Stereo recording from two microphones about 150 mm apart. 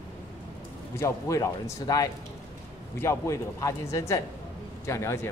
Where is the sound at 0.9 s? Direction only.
20° left (ahead or behind).